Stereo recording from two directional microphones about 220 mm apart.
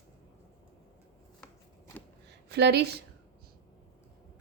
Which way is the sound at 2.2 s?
50° right (ahead or behind).